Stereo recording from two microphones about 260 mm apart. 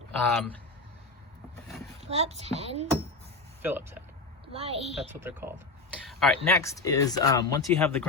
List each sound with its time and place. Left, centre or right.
0.3 s speech: centre
2.0 s a child's voice: right
3.6 s speech: centre
4.5 s a child's voice: right
4.9 s speech: centre
6.1 s speech: centre